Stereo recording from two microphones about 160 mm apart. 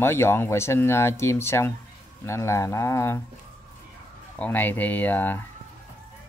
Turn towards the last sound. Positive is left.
turn(degrees=10)  # may be behind; listen again after turning